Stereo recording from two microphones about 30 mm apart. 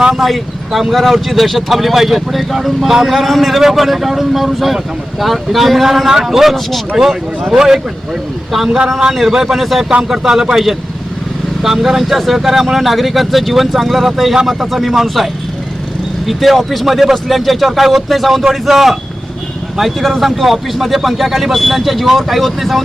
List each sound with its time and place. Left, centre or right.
0.2 s speech: centre
11.6 s speech: centre